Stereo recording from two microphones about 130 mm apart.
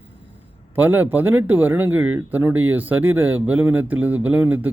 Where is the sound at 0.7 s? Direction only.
15° right (ahead or behind).